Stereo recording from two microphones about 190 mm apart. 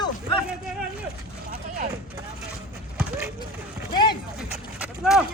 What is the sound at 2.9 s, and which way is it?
Vehicle, 10° right (ahead or behind).